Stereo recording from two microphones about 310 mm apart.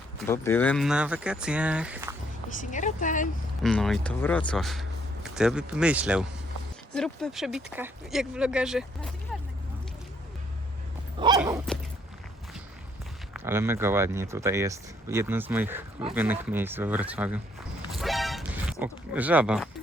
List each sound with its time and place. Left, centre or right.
0.2 s speech: centre
2.6 s speech: left
3.6 s speech: centre
11.2 s speech: centre
13.3 s speech: centre
17.9 s music: centre